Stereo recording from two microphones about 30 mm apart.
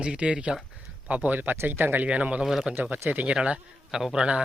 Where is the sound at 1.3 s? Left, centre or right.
Right.